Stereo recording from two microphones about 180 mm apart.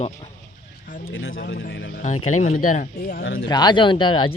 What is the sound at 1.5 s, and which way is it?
Speech, 70° left (ahead or behind).